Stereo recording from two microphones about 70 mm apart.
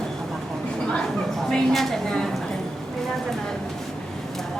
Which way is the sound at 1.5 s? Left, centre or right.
Centre.